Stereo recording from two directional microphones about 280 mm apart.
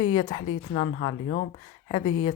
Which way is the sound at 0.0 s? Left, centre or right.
Centre.